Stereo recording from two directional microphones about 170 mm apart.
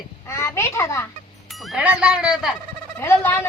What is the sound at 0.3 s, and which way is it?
Speech, 15° left (ahead or behind).